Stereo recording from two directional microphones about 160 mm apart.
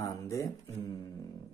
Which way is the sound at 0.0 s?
20° left (ahead or behind).